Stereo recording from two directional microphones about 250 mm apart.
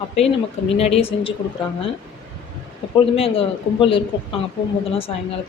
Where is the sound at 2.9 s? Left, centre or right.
Left.